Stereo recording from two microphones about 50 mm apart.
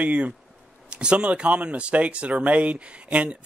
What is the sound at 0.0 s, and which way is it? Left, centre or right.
Speech, right.